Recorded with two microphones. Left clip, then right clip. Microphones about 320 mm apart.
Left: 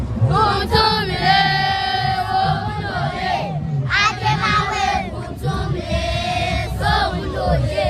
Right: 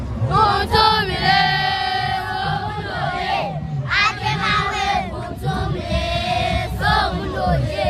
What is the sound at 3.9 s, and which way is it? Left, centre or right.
Music, centre.